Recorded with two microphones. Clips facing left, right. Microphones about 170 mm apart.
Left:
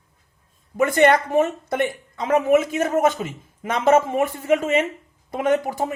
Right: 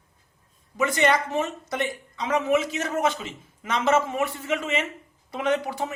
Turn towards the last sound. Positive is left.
turn(degrees=45)  # may be behind; listen again after turning